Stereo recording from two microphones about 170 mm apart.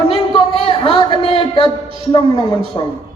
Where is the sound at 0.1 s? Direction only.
30° right (ahead or behind).